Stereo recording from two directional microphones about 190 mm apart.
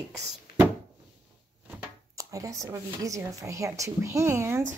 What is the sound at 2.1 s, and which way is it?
Speech, 15° right (ahead or behind).